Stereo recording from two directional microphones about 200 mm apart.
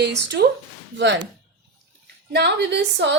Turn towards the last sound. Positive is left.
turn(degrees=-60)  # may be behind; listen again after turning